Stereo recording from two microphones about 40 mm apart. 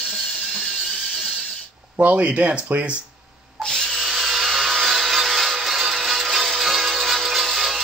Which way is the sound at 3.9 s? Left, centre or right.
Centre.